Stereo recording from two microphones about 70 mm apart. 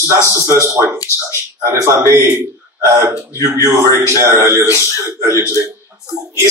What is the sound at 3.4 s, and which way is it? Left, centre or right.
Speech, right.